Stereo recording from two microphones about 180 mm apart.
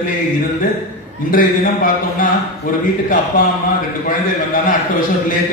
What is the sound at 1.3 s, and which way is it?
Speech, 50° left (ahead or behind).